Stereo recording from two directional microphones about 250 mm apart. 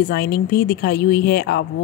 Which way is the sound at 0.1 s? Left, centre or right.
Left.